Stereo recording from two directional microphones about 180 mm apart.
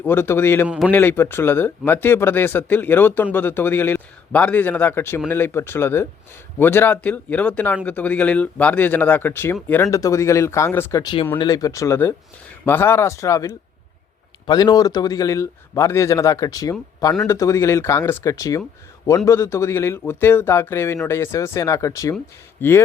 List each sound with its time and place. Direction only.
0.0 s a man's voice: 10° left (ahead or behind)